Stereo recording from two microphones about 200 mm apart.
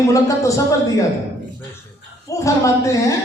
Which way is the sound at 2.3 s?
15° left (ahead or behind).